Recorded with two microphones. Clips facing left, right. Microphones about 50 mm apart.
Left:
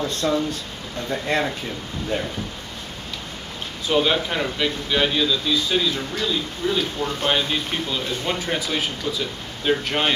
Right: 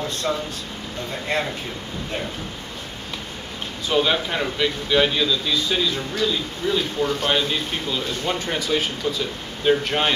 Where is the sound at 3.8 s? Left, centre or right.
Centre.